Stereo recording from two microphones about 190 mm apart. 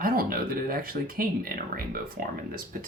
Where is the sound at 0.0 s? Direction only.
50° right (ahead or behind).